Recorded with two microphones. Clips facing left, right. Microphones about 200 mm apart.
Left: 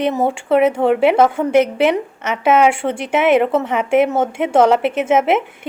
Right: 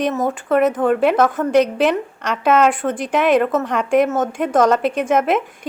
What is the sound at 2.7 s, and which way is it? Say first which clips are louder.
Speech: left 1 dB; 25° left (ahead or behind).